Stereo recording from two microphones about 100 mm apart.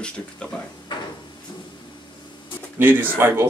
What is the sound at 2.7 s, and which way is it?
Speech, 20° right (ahead or behind).